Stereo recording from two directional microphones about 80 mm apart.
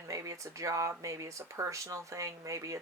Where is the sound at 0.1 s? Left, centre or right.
Right.